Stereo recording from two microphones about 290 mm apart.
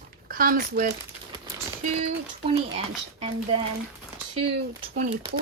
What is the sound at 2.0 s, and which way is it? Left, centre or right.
A woman's voice, right.